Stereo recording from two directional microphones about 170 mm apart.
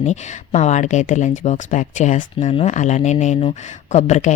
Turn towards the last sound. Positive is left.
turn(degrees=45)  # may be behind; listen again after turning